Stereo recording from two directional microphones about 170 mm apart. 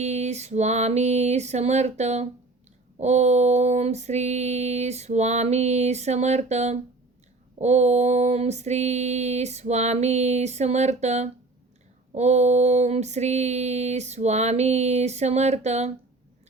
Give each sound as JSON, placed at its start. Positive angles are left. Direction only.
{"t": 0.0, "sound": "female singing", "side_deg": -40}